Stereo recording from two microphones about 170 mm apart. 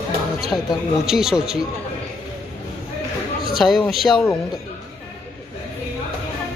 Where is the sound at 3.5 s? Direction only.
Centre (ahead or behind).